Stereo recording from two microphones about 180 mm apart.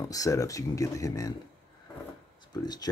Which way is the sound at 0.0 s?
20° left (ahead or behind).